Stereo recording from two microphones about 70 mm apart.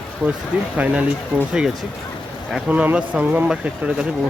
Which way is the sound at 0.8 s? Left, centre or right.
Centre.